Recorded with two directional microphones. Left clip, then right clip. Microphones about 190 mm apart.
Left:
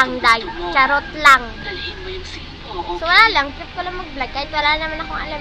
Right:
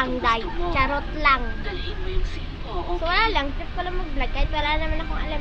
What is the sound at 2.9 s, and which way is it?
A woman's voice, 5° right (ahead or behind).